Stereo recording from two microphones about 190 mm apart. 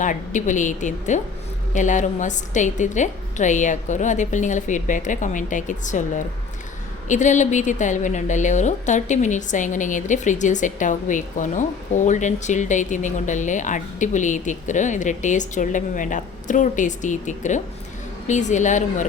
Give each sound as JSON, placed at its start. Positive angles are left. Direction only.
{"t": 0.0, "sound": "a woman's voice", "side_deg": 40}